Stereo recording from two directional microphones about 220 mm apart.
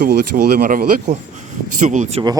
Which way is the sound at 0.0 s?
45° right (ahead or behind).